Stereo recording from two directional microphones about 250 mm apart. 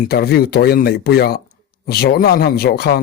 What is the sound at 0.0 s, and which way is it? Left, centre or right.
Speech, left.